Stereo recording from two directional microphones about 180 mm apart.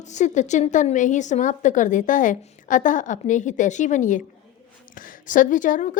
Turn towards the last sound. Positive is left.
turn(degrees=45)  # may be behind; listen again after turning